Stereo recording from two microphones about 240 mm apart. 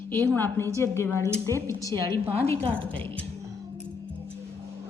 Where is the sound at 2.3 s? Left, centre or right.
Right.